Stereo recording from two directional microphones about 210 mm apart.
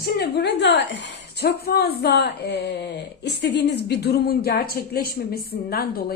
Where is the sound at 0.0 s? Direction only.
50° left (ahead or behind).